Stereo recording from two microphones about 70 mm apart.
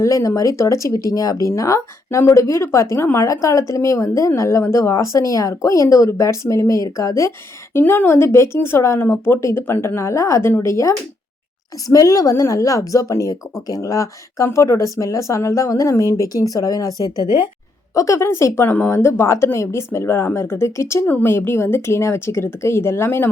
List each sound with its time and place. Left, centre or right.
0.0 s speech: left
17.9 s a woman's voice: left